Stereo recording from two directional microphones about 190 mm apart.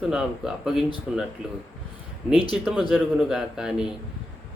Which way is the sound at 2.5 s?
5° right (ahead or behind).